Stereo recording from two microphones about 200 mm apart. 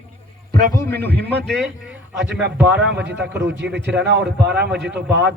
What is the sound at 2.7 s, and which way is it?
A man's voice, 60° right (ahead or behind).